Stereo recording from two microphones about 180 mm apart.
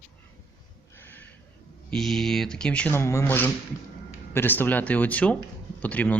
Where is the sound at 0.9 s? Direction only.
10° left (ahead or behind).